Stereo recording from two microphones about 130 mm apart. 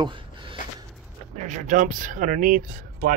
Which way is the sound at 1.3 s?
65° right (ahead or behind).